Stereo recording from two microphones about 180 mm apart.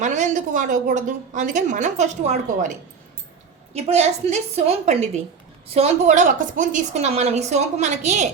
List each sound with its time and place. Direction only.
0.0 s a woman's voice: 40° right (ahead or behind)
3.8 s a woman's voice: 35° right (ahead or behind)